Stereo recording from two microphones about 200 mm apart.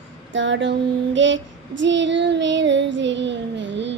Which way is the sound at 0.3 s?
65° right (ahead or behind).